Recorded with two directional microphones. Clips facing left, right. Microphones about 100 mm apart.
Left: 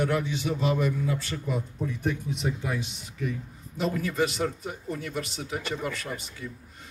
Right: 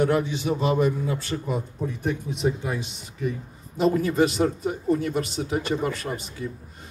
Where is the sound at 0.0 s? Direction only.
35° right (ahead or behind).